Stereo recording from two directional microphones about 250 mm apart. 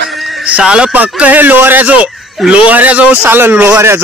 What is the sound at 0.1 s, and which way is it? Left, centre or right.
Speech, centre.